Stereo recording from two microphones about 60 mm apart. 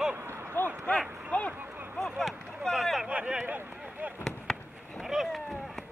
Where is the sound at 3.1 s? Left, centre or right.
Centre.